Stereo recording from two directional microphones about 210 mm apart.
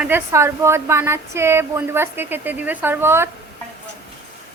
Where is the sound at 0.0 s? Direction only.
10° right (ahead or behind).